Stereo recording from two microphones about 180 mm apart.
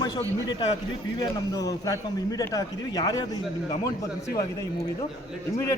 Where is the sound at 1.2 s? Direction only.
20° left (ahead or behind).